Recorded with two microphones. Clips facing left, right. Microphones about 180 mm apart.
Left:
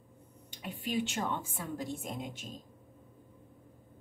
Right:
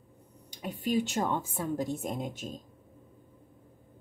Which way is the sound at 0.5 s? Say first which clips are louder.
Right 6 dB; 40° right (ahead or behind).